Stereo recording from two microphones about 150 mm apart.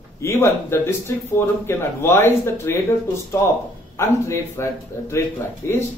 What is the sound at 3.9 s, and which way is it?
Speech, 20° left (ahead or behind).